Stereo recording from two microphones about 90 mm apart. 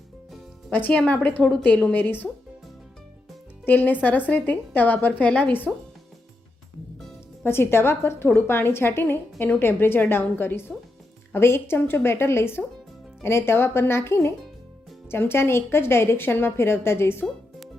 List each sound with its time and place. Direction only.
0.7 s a woman's voice: 15° left (ahead or behind)
3.7 s a woman's voice: 20° left (ahead or behind)
7.4 s a woman's voice: 25° left (ahead or behind)